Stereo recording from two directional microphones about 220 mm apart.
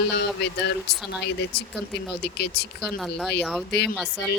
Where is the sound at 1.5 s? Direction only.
50° left (ahead or behind).